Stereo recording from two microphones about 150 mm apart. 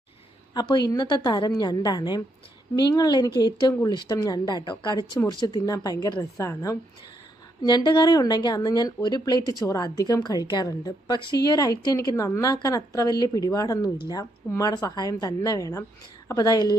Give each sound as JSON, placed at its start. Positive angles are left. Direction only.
{"t": 0.5, "sound": "a woman's voice", "side_deg": 30}
{"t": 7.9, "sound": "a woman's voice", "side_deg": 30}